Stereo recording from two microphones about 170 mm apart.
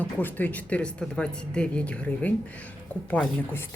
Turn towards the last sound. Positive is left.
turn(degrees=10)  # may be behind; listen again after turning